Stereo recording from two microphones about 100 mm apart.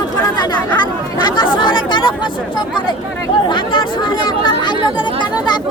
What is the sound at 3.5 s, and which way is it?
Chatter, 55° left (ahead or behind).